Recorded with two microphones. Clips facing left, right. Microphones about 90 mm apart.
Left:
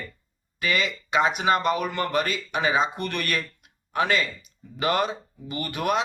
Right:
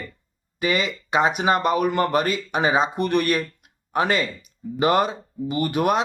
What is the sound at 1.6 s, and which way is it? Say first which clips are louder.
Speech: right 3 dB; 50° right (ahead or behind).